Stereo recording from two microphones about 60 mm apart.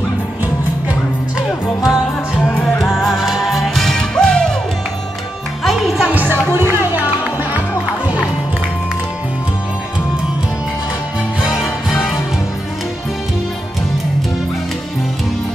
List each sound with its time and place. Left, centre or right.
1.8 s music: centre
5.6 s music: centre
6.1 s music: right